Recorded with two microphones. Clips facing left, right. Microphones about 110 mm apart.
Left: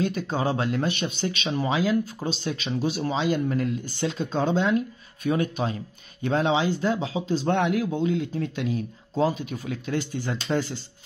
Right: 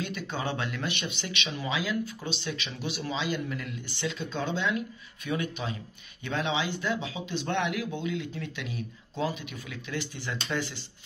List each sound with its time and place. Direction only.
0.0 s speech: 40° left (ahead or behind)